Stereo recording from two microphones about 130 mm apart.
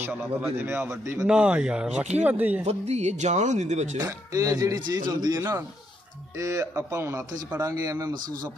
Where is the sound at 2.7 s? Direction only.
55° right (ahead or behind).